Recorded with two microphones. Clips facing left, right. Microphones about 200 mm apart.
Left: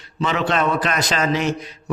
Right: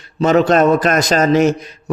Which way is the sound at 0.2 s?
45° right (ahead or behind).